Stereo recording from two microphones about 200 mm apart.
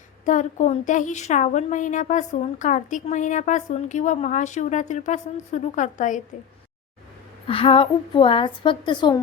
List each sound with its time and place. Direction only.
0.3 s a woman's voice: 35° left (ahead or behind)
7.4 s a woman's voice: 25° left (ahead or behind)